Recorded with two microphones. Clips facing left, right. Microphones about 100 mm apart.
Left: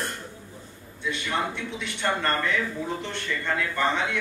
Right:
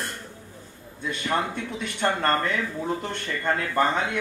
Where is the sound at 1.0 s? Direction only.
45° right (ahead or behind).